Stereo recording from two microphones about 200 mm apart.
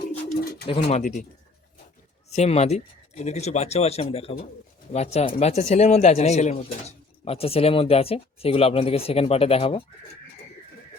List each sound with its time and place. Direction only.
0.7 s speech: 30° left (ahead or behind)
2.3 s speech: 35° left (ahead or behind)